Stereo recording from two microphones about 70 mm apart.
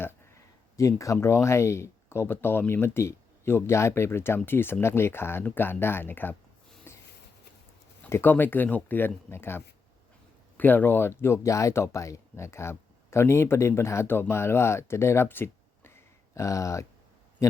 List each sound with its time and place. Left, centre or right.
0.8 s speech: left
6.9 s a sound: left
8.1 s speech: left
11.2 s speech: left
16.3 s speech: left